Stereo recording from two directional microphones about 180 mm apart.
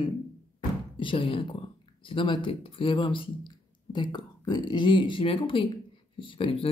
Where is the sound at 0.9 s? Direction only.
30° left (ahead or behind).